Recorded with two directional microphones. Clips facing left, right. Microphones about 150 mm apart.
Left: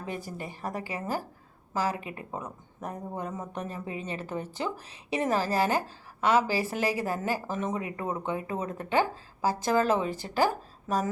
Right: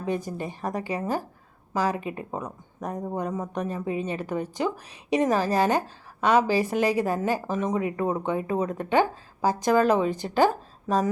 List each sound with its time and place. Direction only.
0.0 s a woman's voice: 20° right (ahead or behind)